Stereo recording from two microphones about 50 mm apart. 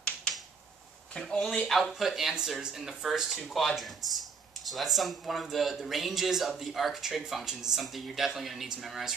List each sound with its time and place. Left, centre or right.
1.1 s speech: centre
1.7 s speech: centre
7.4 s speech: centre